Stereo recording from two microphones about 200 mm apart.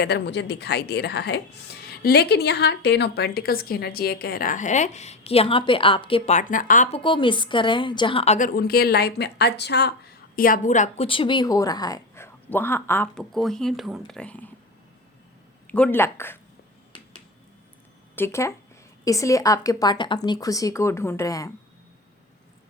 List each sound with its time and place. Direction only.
0.0 s a woman's voice: 55° left (ahead or behind); by 7.0 s 40° left (ahead or behind)
7.0 s a woman's voice: 25° left (ahead or behind); by 14.5 s 5° left (ahead or behind)
15.7 s speech: 10° left (ahead or behind)
18.2 s speech: 15° left (ahead or behind)